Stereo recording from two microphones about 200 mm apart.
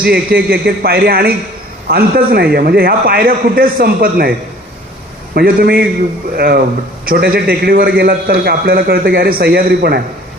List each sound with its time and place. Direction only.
0.0 s a man's voice: 50° right (ahead or behind)
5.3 s a man's voice: 45° right (ahead or behind)